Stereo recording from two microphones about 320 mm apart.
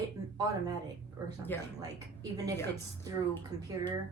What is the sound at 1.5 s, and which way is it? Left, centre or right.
Speech, centre.